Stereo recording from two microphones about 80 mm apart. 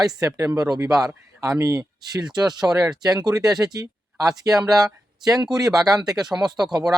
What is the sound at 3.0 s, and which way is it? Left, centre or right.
Speech, right.